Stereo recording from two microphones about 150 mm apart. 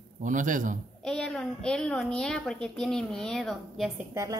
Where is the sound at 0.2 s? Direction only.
60° right (ahead or behind).